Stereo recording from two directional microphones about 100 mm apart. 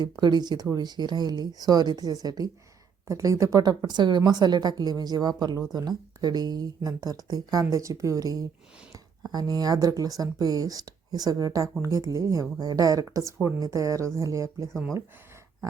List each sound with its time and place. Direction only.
0.0 s speech: 45° right (ahead or behind)